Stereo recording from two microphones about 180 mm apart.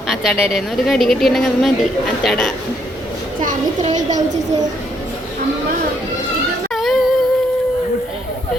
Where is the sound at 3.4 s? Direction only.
40° right (ahead or behind).